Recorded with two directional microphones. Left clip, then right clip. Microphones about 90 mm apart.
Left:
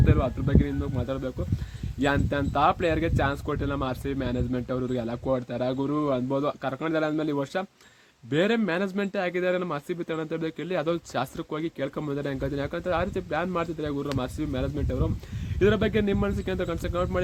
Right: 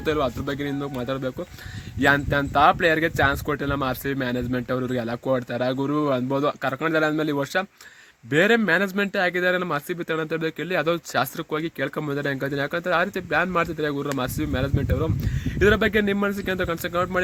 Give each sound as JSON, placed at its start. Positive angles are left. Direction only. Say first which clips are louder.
{"t": 0.0, "sound": "speech", "louder": "right 4 dB", "side_deg": -40}